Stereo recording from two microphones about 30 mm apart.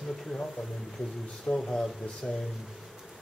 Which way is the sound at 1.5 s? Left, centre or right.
Left.